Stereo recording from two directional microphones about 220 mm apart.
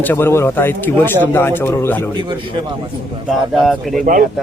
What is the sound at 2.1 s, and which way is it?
Speech, 20° right (ahead or behind).